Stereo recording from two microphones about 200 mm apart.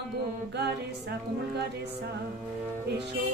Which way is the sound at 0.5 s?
55° right (ahead or behind).